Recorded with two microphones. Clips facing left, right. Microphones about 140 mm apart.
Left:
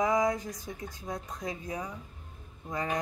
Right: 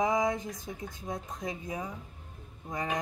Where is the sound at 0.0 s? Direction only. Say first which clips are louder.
Left 1 dB; 20° right (ahead or behind).